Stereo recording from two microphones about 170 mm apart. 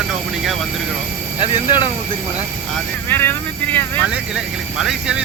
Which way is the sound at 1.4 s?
25° left (ahead or behind).